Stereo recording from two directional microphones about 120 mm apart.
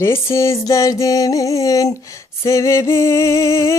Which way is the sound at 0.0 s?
20° left (ahead or behind).